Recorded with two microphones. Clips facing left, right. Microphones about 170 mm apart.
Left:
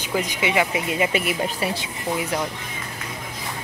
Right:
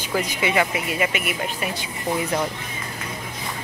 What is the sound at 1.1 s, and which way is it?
Speech, 30° left (ahead or behind).